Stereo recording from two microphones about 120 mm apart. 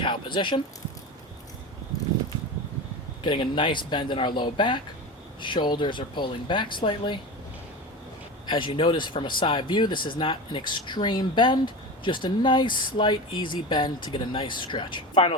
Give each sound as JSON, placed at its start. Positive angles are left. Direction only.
{"t": 0.0, "sound": "speech", "side_deg": 40}
{"t": 3.2, "sound": "speech", "side_deg": 40}
{"t": 8.4, "sound": "speech", "side_deg": 45}